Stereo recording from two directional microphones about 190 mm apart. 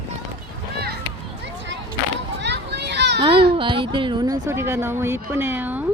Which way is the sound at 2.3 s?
65° right (ahead or behind).